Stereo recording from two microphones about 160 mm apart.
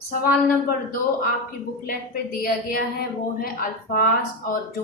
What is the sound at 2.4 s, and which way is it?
A woman's voice, 65° left (ahead or behind).